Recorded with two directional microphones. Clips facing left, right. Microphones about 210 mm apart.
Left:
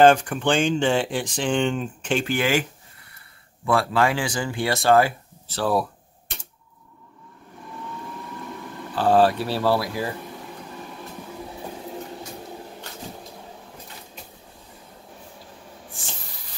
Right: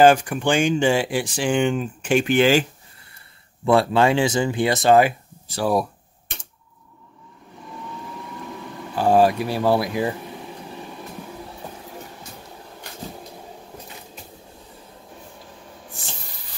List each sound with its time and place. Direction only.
0.0 s speech: 10° right (ahead or behind); by 2.6 s 25° right (ahead or behind)
3.6 s speech: 25° right (ahead or behind)
8.5 s speech: 10° right (ahead or behind)